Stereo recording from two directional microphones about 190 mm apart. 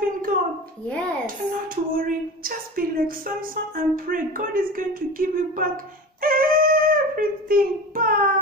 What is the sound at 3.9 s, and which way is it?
A woman's voice, 45° right (ahead or behind).